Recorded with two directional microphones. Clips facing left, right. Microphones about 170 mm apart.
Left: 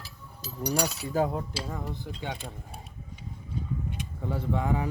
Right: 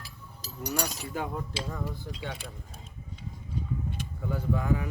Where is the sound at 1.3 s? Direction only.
20° left (ahead or behind).